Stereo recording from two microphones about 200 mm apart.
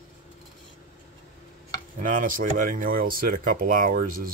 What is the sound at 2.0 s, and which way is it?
Speech, 40° right (ahead or behind).